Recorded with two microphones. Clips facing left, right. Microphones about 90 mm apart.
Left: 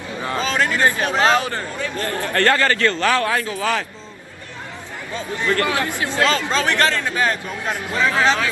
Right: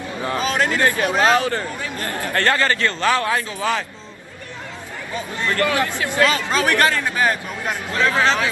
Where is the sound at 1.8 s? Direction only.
20° right (ahead or behind).